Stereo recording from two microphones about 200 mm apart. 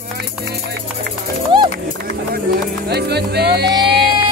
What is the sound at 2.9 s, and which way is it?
Speech, 55° right (ahead or behind).